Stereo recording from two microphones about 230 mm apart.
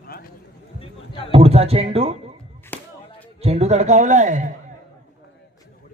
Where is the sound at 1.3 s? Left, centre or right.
Right.